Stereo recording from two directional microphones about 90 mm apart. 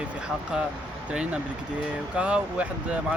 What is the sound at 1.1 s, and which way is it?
Speech, 10° right (ahead or behind).